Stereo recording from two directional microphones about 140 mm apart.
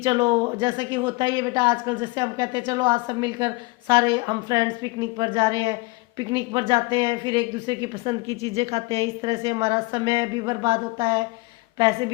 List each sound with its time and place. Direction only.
0.0 s a woman's voice: 35° right (ahead or behind)
8.3 s a woman's voice: 25° left (ahead or behind)
8.5 s a woman's voice: 40° right (ahead or behind)